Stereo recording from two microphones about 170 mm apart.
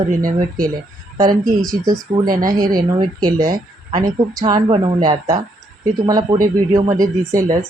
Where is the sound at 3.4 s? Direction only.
55° right (ahead or behind).